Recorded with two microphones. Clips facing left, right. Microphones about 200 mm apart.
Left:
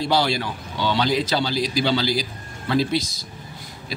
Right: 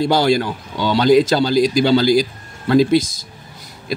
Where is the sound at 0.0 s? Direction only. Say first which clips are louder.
Right 6 dB; 45° right (ahead or behind).